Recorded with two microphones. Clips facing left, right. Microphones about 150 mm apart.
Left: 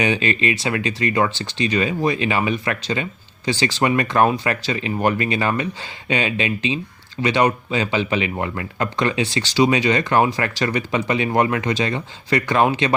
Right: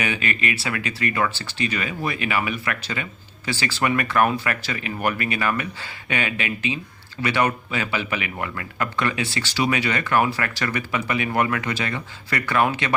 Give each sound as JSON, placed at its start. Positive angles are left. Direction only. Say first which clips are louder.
{"t": 0.0, "sound": "speech", "louder": "left 6 dB", "side_deg": 25}